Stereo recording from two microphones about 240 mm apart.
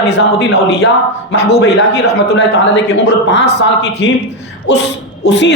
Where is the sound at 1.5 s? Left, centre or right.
Left.